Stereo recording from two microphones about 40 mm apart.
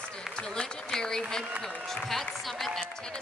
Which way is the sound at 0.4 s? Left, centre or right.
Centre.